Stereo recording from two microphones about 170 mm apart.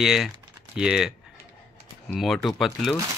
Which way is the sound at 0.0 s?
Centre (ahead or behind).